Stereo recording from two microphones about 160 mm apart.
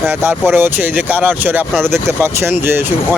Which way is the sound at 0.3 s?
15° right (ahead or behind).